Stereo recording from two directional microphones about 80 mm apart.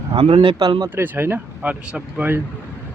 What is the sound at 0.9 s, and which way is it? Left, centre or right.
Speech, right.